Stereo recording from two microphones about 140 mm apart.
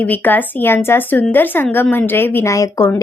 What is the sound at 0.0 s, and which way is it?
A woman's voice, 15° left (ahead or behind).